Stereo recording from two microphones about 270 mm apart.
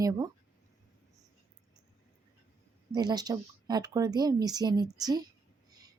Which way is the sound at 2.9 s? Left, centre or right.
Centre.